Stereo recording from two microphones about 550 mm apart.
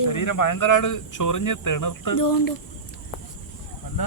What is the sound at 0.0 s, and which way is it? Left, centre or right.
Speech, left.